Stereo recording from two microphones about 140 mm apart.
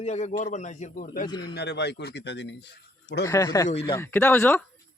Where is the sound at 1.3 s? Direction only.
35° left (ahead or behind).